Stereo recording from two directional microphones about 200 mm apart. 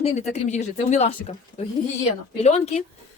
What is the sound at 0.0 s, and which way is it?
Speech, 35° left (ahead or behind).